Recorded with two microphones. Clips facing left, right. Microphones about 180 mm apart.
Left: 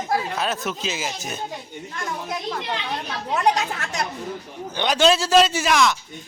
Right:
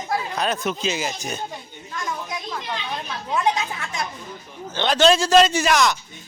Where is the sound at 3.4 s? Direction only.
65° left (ahead or behind).